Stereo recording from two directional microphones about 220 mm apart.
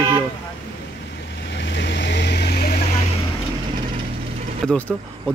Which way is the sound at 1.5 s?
55° left (ahead or behind).